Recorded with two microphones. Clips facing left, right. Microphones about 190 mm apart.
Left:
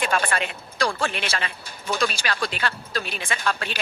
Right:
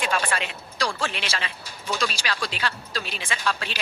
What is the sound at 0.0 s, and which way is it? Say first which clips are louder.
Speech: left 2 dB; 55° left (ahead or behind).